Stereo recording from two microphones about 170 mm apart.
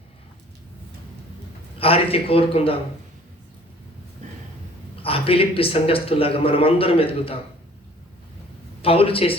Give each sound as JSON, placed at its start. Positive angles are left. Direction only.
{"t": 1.8, "sound": "a man's voice", "side_deg": 35}
{"t": 4.2, "sound": "a sound", "side_deg": -40}
{"t": 5.0, "sound": "a man's voice", "side_deg": 35}
{"t": 8.8, "sound": "a man's voice", "side_deg": 35}